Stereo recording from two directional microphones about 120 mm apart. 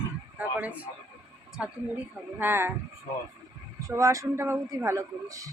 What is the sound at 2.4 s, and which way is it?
Speech, 20° right (ahead or behind).